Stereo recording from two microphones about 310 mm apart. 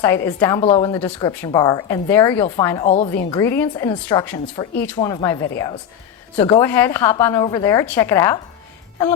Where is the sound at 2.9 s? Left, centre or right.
Left.